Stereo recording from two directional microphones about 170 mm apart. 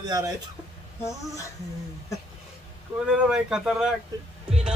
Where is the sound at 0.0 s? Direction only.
25° right (ahead or behind).